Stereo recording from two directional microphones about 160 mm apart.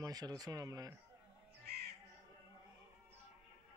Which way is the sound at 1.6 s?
90° right.